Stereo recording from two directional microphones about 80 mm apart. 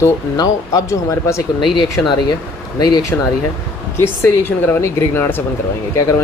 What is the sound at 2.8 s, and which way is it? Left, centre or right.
Speech, left.